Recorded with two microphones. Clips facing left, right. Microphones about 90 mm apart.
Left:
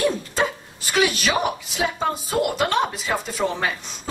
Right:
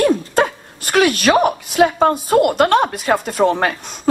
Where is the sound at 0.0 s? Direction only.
55° right (ahead or behind).